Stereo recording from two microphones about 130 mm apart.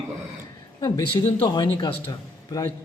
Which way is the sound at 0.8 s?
30° left (ahead or behind).